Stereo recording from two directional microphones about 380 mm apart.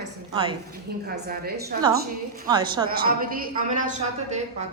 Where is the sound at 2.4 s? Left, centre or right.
Centre.